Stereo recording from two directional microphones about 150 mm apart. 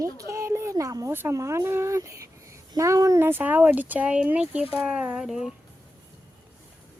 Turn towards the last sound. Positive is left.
turn(degrees=-5)  # may be behind; listen again after turning